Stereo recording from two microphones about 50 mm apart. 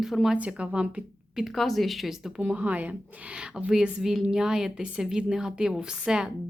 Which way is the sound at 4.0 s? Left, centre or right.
Centre.